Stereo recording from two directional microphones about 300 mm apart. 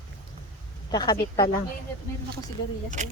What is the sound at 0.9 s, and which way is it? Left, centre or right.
Speech, centre.